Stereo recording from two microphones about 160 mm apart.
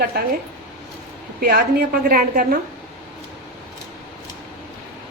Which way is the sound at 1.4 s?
70° right (ahead or behind).